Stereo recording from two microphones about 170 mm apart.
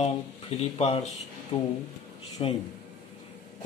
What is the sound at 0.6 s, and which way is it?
A man's voice, 40° left (ahead or behind).